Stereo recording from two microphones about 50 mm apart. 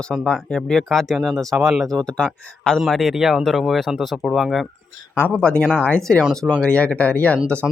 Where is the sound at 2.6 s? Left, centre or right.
Left.